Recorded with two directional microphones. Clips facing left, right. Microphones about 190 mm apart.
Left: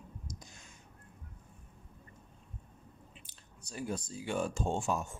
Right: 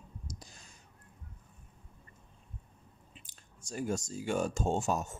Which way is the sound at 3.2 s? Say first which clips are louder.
Right 3 dB; 45° right (ahead or behind).